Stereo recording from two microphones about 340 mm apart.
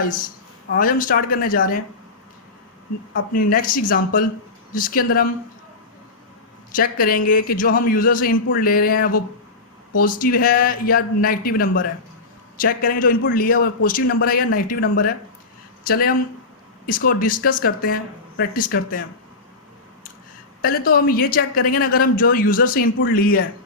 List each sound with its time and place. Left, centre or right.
0.8 s speech: left
3.2 s speech: left
6.7 s speech: left
20.6 s speech: left